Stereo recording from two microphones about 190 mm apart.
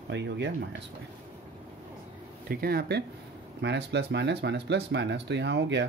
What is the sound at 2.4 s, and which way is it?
Speech, 55° right (ahead or behind).